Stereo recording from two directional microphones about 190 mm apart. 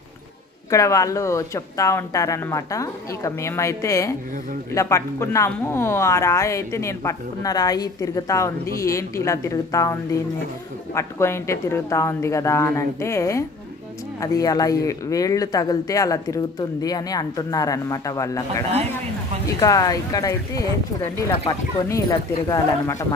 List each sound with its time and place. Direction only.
0.7 s speech: 15° left (ahead or behind)
11.0 s speech: 15° left (ahead or behind)
19.6 s speech: 20° left (ahead or behind)